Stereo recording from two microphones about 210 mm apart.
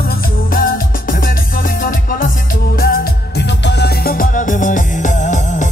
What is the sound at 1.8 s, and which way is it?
Music, 40° left (ahead or behind).